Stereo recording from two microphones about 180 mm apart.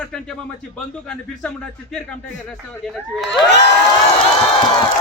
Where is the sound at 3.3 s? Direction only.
75° left (ahead or behind).